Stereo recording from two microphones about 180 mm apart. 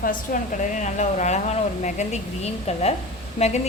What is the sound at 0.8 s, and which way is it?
Speech, 40° left (ahead or behind).